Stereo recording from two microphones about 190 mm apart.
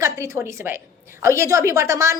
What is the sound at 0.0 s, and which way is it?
A woman's voice, 15° right (ahead or behind).